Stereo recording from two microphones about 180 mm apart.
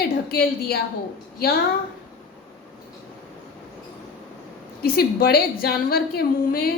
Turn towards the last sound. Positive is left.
turn(degrees=55)  # may be behind; listen again after turning